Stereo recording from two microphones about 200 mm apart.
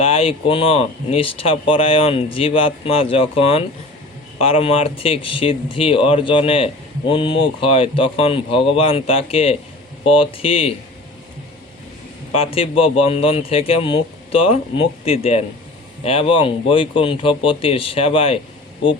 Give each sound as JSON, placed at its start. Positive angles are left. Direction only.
{"t": 0.0, "sound": "speech", "side_deg": 30}
{"t": 12.3, "sound": "speech", "side_deg": 30}